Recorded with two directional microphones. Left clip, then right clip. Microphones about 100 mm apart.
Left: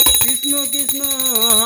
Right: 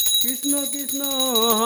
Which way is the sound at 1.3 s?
20° right (ahead or behind).